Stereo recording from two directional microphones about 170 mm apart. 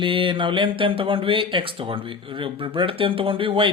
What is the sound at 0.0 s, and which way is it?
Speech, 30° right (ahead or behind).